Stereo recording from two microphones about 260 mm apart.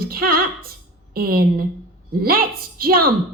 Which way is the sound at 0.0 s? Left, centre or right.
Right.